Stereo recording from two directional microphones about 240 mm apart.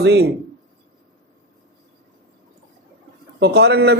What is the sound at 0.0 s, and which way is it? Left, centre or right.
Speech, right.